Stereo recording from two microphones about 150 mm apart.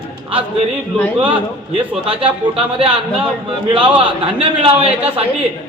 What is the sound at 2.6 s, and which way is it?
Speech, 40° right (ahead or behind).